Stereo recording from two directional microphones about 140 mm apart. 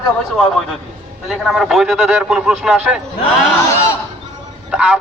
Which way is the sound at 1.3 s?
Centre (ahead or behind).